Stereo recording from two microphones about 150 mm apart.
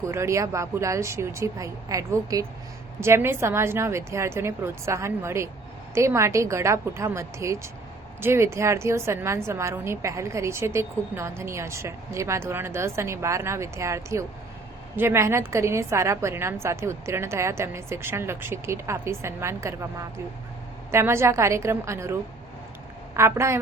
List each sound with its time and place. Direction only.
0.0 s a woman's voice: 20° right (ahead or behind)
20.9 s a woman's voice: 15° right (ahead or behind)
23.1 s a woman's voice: 20° right (ahead or behind)